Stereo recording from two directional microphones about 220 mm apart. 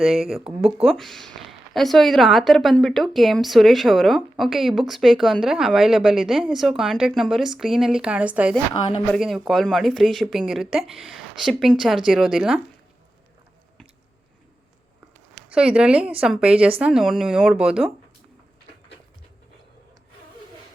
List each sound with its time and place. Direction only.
0.0 s a woman's voice: centre (ahead or behind)
15.5 s a woman's voice: 5° right (ahead or behind)